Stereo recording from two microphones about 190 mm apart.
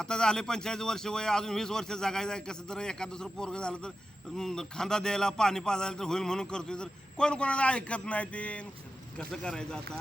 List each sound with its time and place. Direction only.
0.0 s a man's voice: 5° left (ahead or behind)